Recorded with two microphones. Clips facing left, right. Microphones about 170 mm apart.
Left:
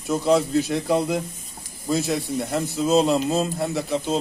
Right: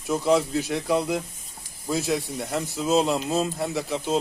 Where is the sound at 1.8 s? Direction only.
10° right (ahead or behind).